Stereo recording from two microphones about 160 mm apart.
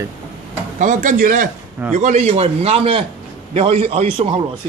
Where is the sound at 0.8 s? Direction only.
50° right (ahead or behind).